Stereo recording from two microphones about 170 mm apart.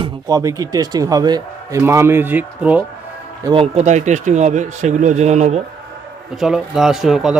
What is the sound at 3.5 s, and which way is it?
Speech, 35° right (ahead or behind).